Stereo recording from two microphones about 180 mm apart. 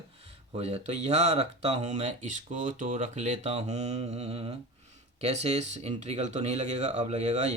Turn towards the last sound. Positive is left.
turn(degrees=-40)  # may be behind; listen again after turning